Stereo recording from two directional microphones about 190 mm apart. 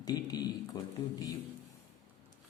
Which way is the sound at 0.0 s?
20° left (ahead or behind).